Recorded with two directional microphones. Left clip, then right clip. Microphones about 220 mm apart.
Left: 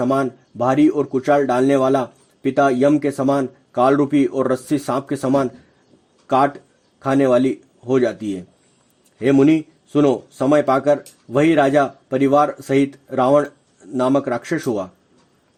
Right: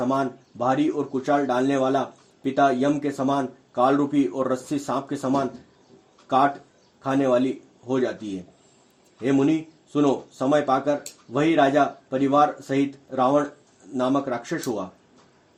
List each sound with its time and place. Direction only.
0.0 s speech: 40° left (ahead or behind)
7.0 s a man's voice: 45° left (ahead or behind)
9.2 s speech: 40° left (ahead or behind)